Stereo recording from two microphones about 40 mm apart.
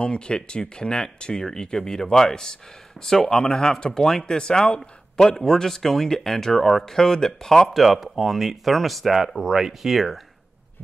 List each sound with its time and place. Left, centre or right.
0.0 s a man's voice: left
7.7 s speech: centre
9.4 s speech: centre